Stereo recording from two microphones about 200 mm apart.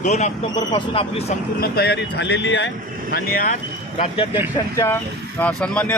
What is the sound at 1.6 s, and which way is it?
Speech, 55° left (ahead or behind).